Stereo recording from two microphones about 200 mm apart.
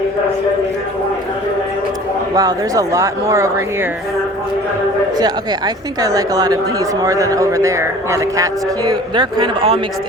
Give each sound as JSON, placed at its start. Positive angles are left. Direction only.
{"t": 2.3, "sound": "a woman's voice", "side_deg": -20}
{"t": 5.1, "sound": "a woman's voice", "side_deg": -20}
{"t": 9.1, "sound": "a man's voice", "side_deg": -25}